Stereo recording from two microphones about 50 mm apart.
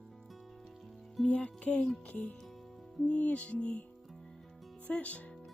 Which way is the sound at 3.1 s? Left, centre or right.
Left.